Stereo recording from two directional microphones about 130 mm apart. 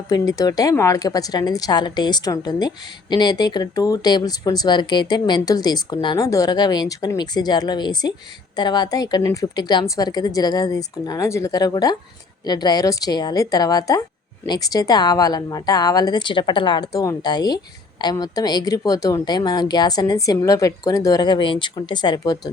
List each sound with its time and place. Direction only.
0.1 s a woman's voice: 30° left (ahead or behind)